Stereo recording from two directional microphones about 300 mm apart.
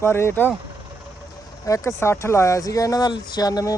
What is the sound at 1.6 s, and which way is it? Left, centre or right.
Speech, centre.